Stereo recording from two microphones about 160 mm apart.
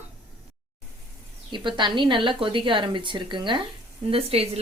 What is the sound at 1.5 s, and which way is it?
A woman's voice, 30° right (ahead or behind).